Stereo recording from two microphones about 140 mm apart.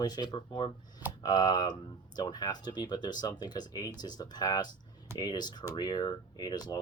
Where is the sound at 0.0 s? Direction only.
30° left (ahead or behind).